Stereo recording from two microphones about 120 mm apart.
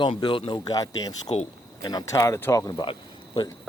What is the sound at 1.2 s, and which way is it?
Speech, 60° left (ahead or behind).